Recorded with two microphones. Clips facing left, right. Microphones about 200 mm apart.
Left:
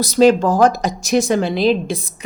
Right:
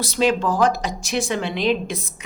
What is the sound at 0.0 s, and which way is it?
A woman's voice, 40° left (ahead or behind).